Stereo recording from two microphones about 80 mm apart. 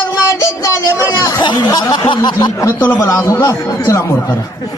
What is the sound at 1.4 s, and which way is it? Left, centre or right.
Snicker, left.